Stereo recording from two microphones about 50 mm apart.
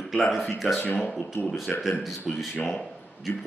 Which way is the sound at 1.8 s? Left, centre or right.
Centre.